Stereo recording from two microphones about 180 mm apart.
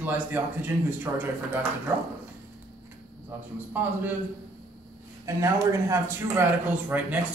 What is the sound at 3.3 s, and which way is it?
Speech, 10° right (ahead or behind).